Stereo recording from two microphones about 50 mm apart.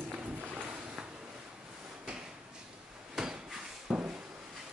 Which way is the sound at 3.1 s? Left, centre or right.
Centre.